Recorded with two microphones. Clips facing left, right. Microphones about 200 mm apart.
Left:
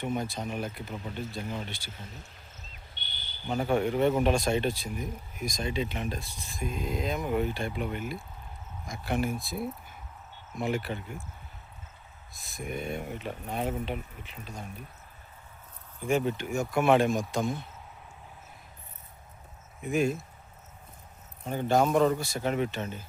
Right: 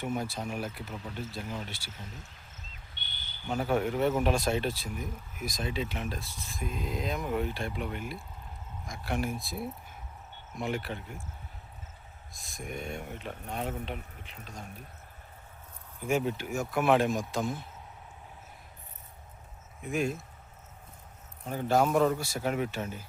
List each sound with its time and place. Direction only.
0.0 s speech: 5° right (ahead or behind)
2.9 s a sound: 50° right (ahead or behind)
3.5 s speech: 5° right (ahead or behind)
12.3 s speech: 5° left (ahead or behind)
16.0 s speech: 5° right (ahead or behind)
19.8 s speech: centre (ahead or behind)
21.4 s speech: centre (ahead or behind)